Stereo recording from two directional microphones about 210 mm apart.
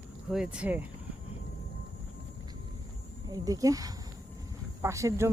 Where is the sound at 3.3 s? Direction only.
15° right (ahead or behind).